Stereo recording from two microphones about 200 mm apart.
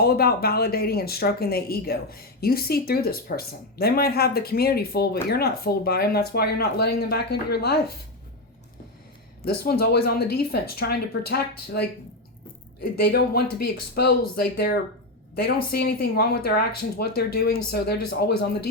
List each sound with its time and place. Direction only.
0.0 s speech: 50° left (ahead or behind)
9.4 s speech: 50° left (ahead or behind)